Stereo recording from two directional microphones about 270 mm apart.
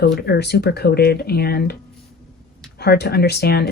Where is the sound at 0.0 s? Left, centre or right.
Left.